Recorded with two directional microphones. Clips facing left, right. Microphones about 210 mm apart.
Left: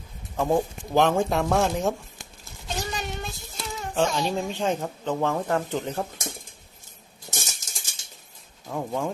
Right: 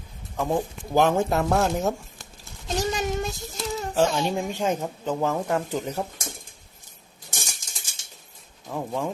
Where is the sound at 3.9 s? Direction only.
5° right (ahead or behind).